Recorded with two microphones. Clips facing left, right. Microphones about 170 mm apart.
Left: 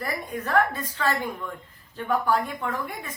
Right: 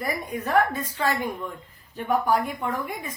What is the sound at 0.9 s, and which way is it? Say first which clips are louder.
A woman's voice: left 1 dB; 15° right (ahead or behind).